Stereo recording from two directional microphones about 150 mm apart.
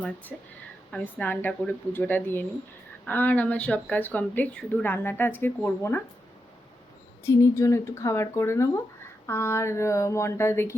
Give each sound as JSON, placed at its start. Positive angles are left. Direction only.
{"t": 0.3, "sound": "speech", "side_deg": 0}
{"t": 7.3, "sound": "speech", "side_deg": 20}